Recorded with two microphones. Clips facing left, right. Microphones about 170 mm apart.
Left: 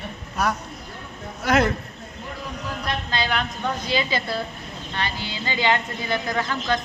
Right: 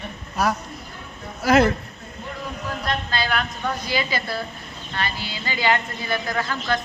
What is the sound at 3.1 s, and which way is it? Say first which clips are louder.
A woman's voice: even; 20° left (ahead or behind).